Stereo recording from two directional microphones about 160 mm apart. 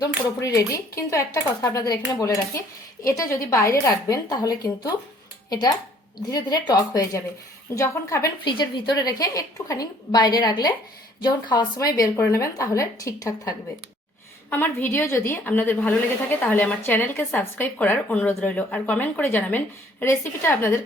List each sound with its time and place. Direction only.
0.3 s speech: 20° left (ahead or behind)
14.5 s speech: 15° left (ahead or behind)